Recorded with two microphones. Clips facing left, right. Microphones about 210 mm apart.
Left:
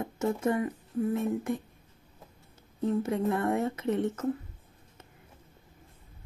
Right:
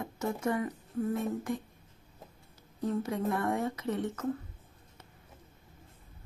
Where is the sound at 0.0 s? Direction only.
25° left (ahead or behind).